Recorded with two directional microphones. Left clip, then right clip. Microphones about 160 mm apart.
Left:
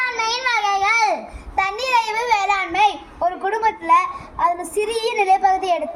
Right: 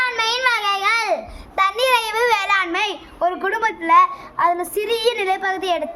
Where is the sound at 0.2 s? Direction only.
20° right (ahead or behind).